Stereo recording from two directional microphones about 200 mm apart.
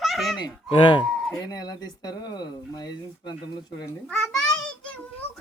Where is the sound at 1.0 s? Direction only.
Centre (ahead or behind).